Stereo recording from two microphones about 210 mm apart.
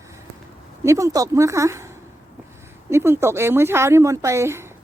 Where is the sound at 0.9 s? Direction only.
15° right (ahead or behind).